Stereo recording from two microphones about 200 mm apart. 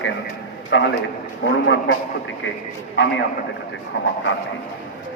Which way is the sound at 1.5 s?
60° left (ahead or behind).